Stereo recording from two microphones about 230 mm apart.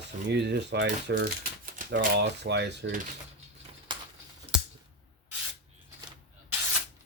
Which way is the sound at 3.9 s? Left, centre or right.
Centre.